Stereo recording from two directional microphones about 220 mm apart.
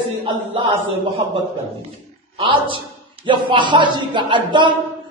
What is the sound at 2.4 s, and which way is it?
A man's voice, 25° right (ahead or behind).